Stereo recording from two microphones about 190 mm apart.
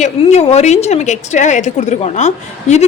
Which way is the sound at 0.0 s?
35° left (ahead or behind).